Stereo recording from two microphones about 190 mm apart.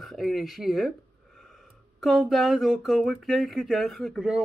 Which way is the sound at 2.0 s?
Centre (ahead or behind).